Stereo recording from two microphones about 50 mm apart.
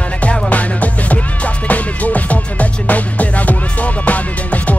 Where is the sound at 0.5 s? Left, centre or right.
Left.